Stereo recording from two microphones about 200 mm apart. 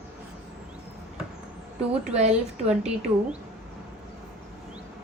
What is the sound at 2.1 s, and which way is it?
Speech, 35° right (ahead or behind).